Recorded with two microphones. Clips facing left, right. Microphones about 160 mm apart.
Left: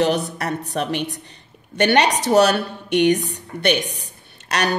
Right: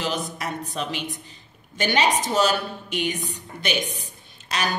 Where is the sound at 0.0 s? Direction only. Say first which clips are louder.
Left 8 dB; 65° left (ahead or behind).